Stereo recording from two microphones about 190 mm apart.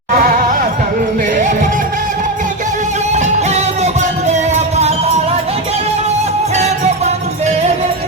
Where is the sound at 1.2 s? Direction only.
40° right (ahead or behind).